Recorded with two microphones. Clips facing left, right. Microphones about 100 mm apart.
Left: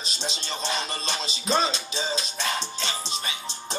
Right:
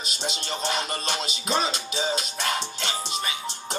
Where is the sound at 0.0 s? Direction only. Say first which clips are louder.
Right 2 dB; 60° right (ahead or behind).